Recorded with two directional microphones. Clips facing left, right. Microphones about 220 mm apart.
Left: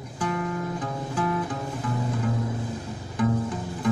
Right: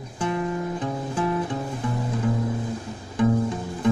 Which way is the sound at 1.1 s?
25° right (ahead or behind).